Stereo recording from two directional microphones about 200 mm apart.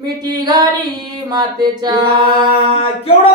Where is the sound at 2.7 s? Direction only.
30° left (ahead or behind).